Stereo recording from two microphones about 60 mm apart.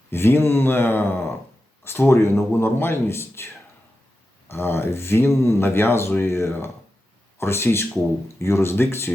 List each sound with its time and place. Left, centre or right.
0.1 s speech: left